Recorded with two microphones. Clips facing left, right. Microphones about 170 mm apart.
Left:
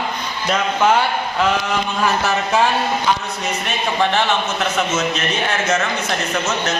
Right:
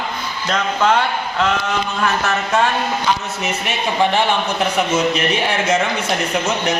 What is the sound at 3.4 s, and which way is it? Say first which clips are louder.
A man's voice: right 1 dB; 10° right (ahead or behind).